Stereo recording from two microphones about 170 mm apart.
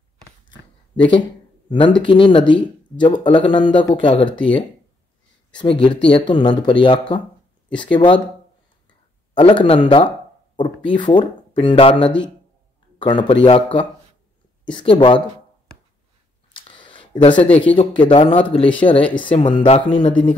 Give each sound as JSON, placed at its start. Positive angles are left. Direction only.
{"t": 1.7, "sound": "speech", "side_deg": 25}
{"t": 5.6, "sound": "speech", "side_deg": 30}
{"t": 9.4, "sound": "speech", "side_deg": 30}
{"t": 16.7, "sound": "a sound", "side_deg": 30}
{"t": 17.7, "sound": "speech", "side_deg": 30}